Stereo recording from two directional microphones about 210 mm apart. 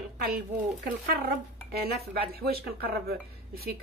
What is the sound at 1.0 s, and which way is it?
A woman's voice, 45° right (ahead or behind).